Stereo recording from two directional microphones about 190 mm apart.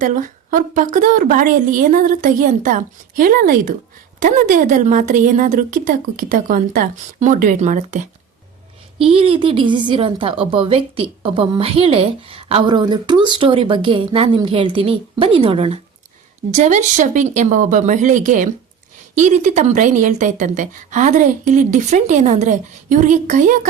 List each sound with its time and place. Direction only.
0.0 s a woman's voice: 45° right (ahead or behind)